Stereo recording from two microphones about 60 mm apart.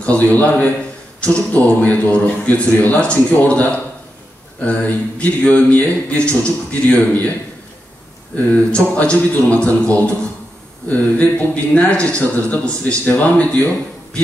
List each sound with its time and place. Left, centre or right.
0.0 s speech: left
8.5 s speech: left
10.9 s speech: left